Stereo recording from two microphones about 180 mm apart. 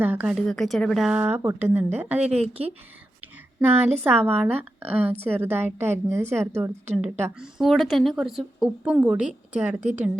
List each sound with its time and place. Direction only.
0.0 s a woman's voice: 10° right (ahead or behind)
0.3 s a woman's voice: centre (ahead or behind)
2.3 s speech: 35° right (ahead or behind)
3.2 s a woman's voice: 15° right (ahead or behind)
7.4 s a woman's voice: centre (ahead or behind)